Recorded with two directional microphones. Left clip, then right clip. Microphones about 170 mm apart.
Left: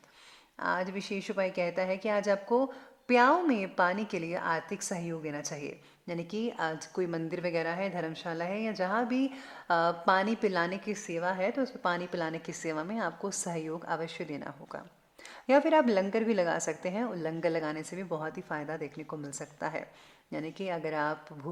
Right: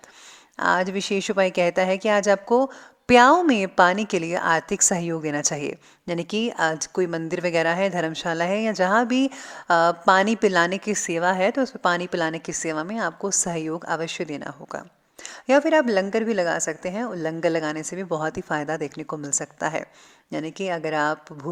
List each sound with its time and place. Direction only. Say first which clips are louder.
0.6 s a woman's voice: right 11 dB; 45° right (ahead or behind)